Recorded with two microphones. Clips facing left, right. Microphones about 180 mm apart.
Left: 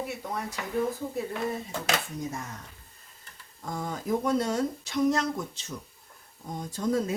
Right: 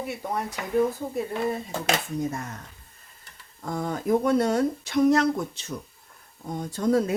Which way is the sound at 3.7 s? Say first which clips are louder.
Right 5 dB; 60° right (ahead or behind).